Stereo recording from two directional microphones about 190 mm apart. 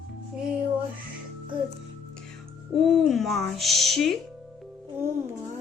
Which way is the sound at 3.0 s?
Centre (ahead or behind).